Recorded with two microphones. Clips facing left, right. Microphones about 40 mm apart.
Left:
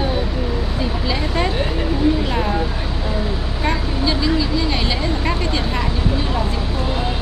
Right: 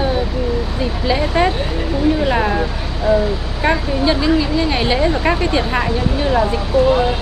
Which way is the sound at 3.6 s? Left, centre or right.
Right.